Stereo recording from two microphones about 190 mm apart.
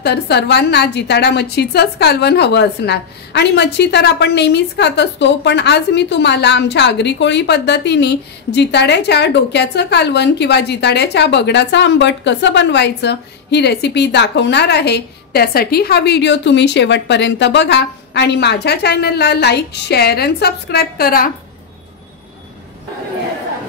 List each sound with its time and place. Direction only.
0.0 s a woman's voice: 60° left (ahead or behind)